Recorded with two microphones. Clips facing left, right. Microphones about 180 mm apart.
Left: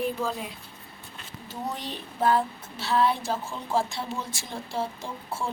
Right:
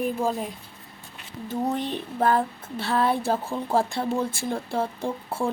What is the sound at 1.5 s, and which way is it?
Speech, 55° right (ahead or behind).